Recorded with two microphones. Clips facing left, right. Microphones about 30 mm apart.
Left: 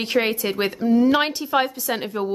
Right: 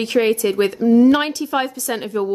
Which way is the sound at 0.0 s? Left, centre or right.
Centre.